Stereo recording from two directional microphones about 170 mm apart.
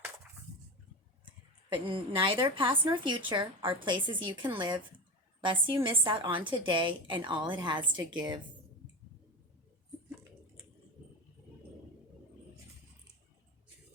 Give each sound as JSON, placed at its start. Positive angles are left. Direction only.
{"t": 1.7, "sound": "a woman's voice", "side_deg": -30}